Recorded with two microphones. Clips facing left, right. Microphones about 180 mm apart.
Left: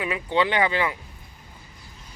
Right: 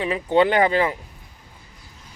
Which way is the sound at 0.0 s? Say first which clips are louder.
Right 4 dB; 35° right (ahead or behind).